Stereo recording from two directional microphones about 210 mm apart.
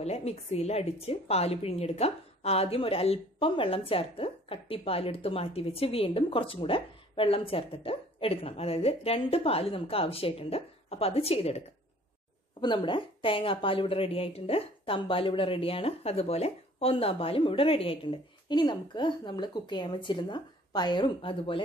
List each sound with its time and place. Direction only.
0.0 s a woman's voice: 30° left (ahead or behind)